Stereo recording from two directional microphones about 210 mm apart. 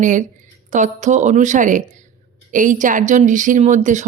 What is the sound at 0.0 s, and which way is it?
Speech, 35° right (ahead or behind).